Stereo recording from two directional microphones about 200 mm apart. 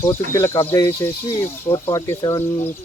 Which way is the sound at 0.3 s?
15° left (ahead or behind).